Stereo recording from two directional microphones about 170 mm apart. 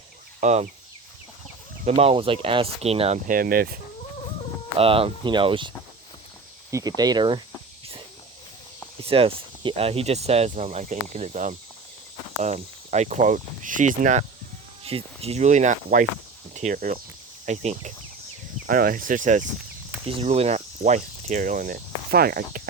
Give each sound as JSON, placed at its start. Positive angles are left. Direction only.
{"t": 0.3, "sound": "speech", "side_deg": -45}
{"t": 1.8, "sound": "speech", "side_deg": -40}
{"t": 3.2, "sound": "speech", "side_deg": -55}
{"t": 4.8, "sound": "speech", "side_deg": -35}
{"t": 9.0, "sound": "speech", "side_deg": -35}
{"t": 14.8, "sound": "speech", "side_deg": -35}
{"t": 17.4, "sound": "speech", "side_deg": -40}
{"t": 18.7, "sound": "speech", "side_deg": -55}
{"t": 20.1, "sound": "speech", "side_deg": -35}